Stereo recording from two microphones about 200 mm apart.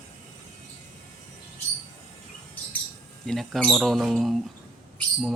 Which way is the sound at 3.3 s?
Centre (ahead or behind).